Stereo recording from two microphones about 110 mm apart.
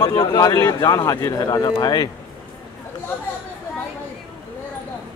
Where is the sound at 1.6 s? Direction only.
35° left (ahead or behind).